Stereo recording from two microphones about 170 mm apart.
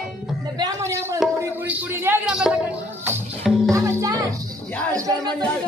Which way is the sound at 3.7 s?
15° right (ahead or behind).